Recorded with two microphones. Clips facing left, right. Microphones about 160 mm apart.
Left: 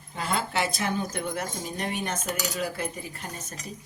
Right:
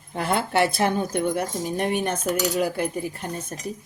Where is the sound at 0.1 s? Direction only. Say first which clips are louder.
Right 6 dB; 60° right (ahead or behind).